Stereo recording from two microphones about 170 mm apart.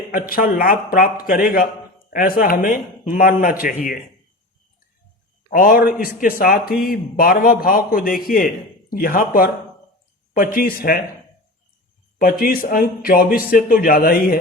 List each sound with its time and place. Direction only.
0.1 s a man's voice: 55° left (ahead or behind)
5.5 s a man's voice: 55° left (ahead or behind)
12.2 s a man's voice: 60° left (ahead or behind)